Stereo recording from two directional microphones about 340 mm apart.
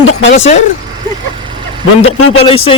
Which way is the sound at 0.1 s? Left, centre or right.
Left.